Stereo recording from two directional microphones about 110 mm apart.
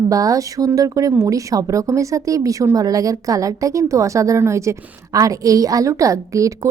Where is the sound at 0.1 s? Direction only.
30° right (ahead or behind).